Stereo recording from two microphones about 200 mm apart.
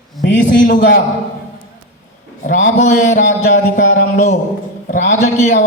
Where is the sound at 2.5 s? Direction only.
40° left (ahead or behind).